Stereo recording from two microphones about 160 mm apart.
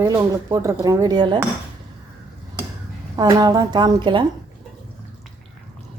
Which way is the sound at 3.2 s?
25° right (ahead or behind).